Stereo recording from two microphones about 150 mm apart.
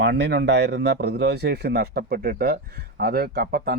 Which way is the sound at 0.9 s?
90° right.